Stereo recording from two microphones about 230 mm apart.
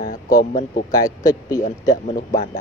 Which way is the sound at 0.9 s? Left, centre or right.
Centre.